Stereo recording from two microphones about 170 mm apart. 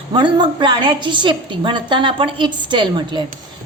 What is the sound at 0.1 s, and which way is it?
A woman's voice, 30° right (ahead or behind).